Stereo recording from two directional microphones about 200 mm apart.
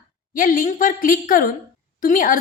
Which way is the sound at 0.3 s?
45° left (ahead or behind).